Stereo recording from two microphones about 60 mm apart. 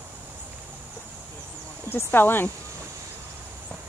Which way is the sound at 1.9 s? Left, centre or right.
Left.